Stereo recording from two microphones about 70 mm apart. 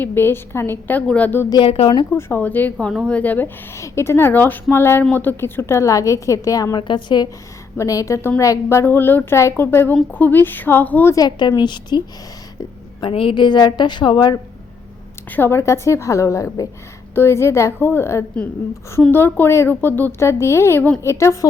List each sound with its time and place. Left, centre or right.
0.0 s a woman's voice: left
1.5 s speech: left
2.4 s a woman's voice: left
3.8 s a woman's voice: left
7.8 s a woman's voice: left
11.1 s a woman's voice: left
13.3 s a woman's voice: left
15.3 s a woman's voice: left